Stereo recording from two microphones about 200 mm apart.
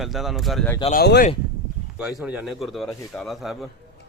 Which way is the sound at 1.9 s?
5° right (ahead or behind).